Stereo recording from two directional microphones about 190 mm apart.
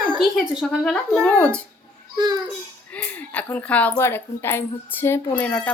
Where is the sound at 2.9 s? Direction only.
10° left (ahead or behind).